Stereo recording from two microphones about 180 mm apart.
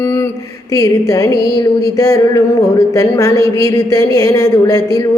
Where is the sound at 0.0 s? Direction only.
15° left (ahead or behind).